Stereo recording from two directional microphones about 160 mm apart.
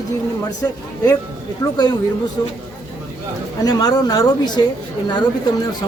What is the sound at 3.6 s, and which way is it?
Speech, 25° left (ahead or behind).